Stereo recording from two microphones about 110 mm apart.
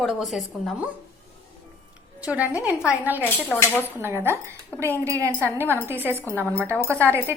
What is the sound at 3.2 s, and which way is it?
Speech, 20° left (ahead or behind).